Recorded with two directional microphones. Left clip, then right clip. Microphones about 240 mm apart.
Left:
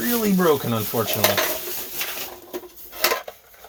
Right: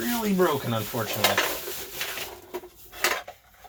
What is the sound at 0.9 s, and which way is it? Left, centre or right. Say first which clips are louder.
Speech: left 9 dB; left.